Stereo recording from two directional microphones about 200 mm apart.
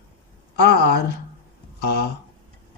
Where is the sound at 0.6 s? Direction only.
55° left (ahead or behind).